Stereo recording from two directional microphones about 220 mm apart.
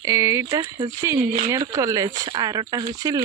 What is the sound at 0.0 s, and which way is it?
Speech, 15° right (ahead or behind).